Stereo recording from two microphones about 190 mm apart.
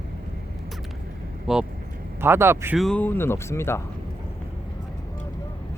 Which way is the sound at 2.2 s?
10° right (ahead or behind).